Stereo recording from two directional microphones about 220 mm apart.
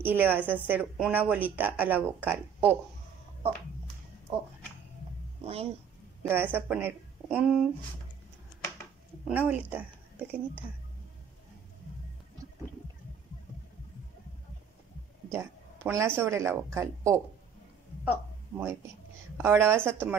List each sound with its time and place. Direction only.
0.0 s speech: 10° right (ahead or behind)
4.3 s music: 25° right (ahead or behind)
5.4 s speech: 30° right (ahead or behind)
6.2 s speech: 10° right (ahead or behind)
9.3 s speech: 5° right (ahead or behind)
15.3 s a sound: 15° right (ahead or behind)
16.2 s speech: 10° right (ahead or behind)